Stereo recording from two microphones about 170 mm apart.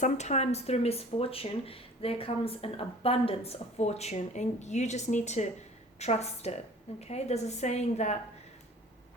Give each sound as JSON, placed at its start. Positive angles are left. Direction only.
{"t": 0.0, "sound": "speech", "side_deg": 40}